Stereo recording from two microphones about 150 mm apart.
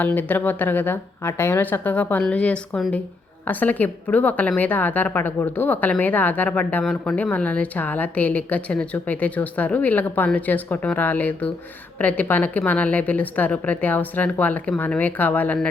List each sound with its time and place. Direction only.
0.0 s a woman's voice: 10° left (ahead or behind)